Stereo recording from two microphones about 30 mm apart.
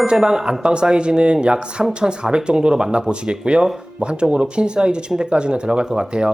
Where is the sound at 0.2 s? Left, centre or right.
Right.